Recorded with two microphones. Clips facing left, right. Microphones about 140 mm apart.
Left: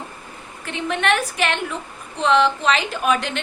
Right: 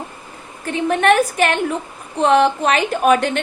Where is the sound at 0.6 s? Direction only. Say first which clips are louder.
Right 6 dB; 40° right (ahead or behind).